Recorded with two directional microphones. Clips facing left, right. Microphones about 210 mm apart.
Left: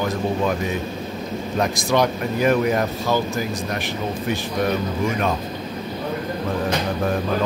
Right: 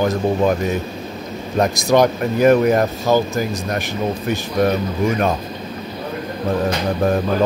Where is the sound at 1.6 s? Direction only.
40° right (ahead or behind).